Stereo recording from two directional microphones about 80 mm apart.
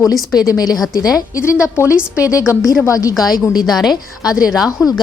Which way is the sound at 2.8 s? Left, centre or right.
Left.